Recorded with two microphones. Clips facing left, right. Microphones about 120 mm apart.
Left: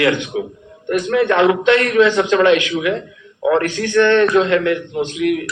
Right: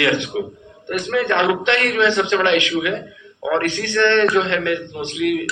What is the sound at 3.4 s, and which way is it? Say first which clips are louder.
A man's voice: left 4 dB; 40° left (ahead or behind).